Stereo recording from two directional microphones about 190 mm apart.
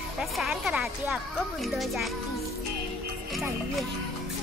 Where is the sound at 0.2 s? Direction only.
Centre (ahead or behind).